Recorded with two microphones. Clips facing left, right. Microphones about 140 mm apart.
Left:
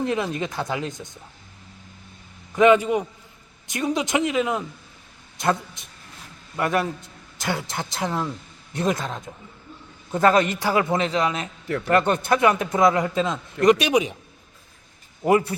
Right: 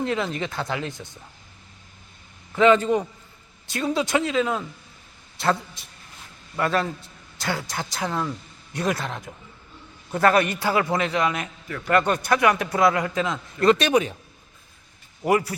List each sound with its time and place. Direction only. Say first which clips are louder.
0.0 s speech: left 1 dB; 15° left (ahead or behind)
2.6 s a man's voice: left 1 dB; 15° left (ahead or behind)
15.3 s a man's voice: left 2 dB; 25° left (ahead or behind)